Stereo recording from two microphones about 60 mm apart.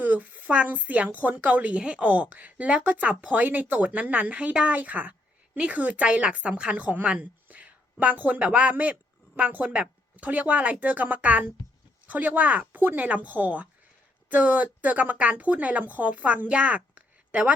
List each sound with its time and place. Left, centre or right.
0.0 s a woman's voice: right